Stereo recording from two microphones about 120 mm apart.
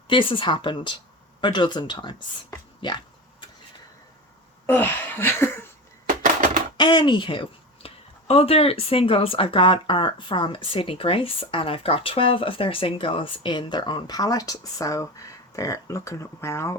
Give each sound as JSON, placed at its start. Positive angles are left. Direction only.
{"t": 0.1, "sound": "a woman's voice", "side_deg": 45}
{"t": 4.6, "sound": "speech", "side_deg": 15}
{"t": 6.7, "sound": "a woman's voice", "side_deg": 35}